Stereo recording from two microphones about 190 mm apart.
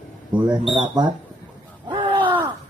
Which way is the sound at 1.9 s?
25° right (ahead or behind).